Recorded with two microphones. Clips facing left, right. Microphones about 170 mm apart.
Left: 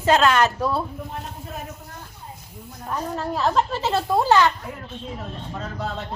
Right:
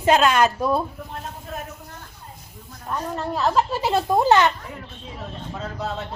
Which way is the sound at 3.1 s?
Centre (ahead or behind).